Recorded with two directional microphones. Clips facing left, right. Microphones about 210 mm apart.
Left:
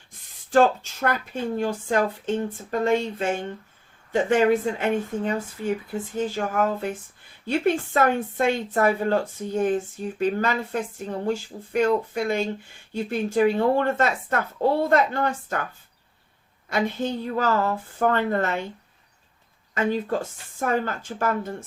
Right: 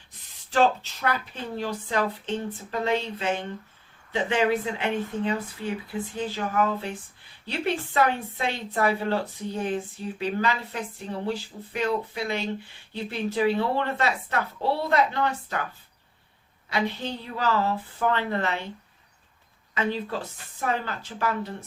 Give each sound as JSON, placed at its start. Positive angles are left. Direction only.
{"t": 0.1, "sound": "speech", "side_deg": 45}
{"t": 16.6, "sound": "speech", "side_deg": 50}
{"t": 19.7, "sound": "speech", "side_deg": 50}